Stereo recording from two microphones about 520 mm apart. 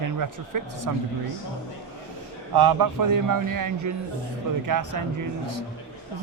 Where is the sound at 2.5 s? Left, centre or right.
Right.